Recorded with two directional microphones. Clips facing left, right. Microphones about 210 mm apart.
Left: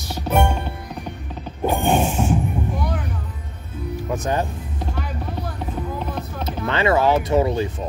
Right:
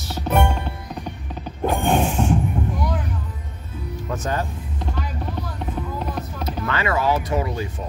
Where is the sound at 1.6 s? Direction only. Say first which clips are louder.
Left 1 dB; 5° left (ahead or behind).